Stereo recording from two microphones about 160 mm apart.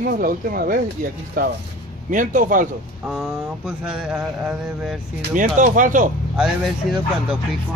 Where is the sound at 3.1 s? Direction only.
5° right (ahead or behind).